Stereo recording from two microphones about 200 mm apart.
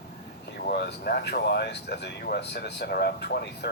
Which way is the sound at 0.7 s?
55° left (ahead or behind).